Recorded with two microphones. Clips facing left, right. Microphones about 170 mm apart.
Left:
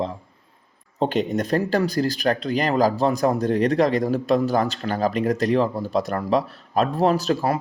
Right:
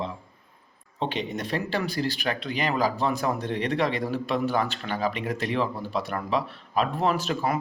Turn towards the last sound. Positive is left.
turn(degrees=35)  # may be behind; listen again after turning